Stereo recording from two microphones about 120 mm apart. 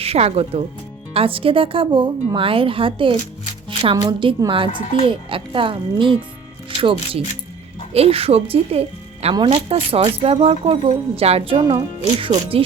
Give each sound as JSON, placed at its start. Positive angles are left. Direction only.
{"t": 0.0, "sound": "a woman's voice", "side_deg": -55}
{"t": 9.3, "sound": "speech", "side_deg": -45}